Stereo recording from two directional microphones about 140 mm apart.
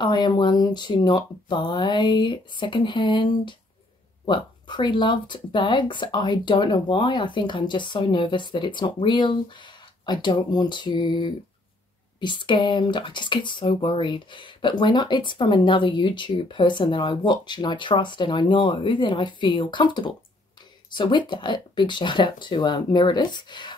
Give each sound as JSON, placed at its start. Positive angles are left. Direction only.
{"t": 0.0, "sound": "speech", "side_deg": 30}